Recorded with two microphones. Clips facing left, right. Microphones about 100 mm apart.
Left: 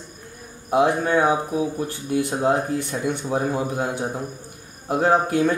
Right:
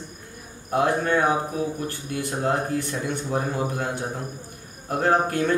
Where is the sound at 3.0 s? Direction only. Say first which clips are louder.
Left 3 dB; 15° left (ahead or behind).